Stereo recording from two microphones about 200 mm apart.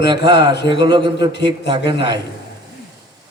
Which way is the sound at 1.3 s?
60° left (ahead or behind).